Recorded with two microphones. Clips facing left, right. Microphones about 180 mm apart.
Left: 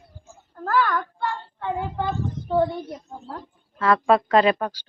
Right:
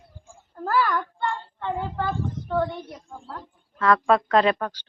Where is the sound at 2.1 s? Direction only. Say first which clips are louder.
Left 2 dB; 25° left (ahead or behind).